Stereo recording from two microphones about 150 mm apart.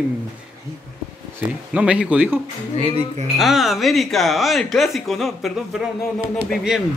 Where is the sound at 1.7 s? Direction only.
10° right (ahead or behind).